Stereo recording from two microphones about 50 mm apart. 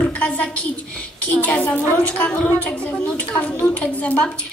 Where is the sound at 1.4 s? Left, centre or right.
Left.